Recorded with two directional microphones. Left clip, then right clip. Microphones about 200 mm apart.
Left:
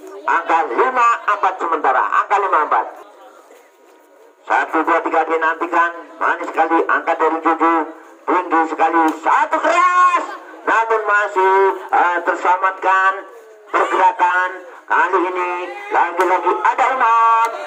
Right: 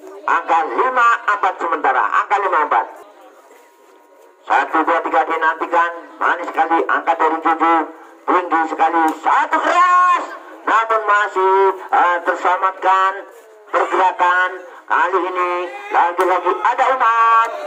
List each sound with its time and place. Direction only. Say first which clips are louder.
0.3 s speech: even; 20° right (ahead or behind)
4.4 s speech: right 1 dB; 20° right (ahead or behind)